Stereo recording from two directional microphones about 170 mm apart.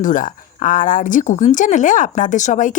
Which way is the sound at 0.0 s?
50° left (ahead or behind).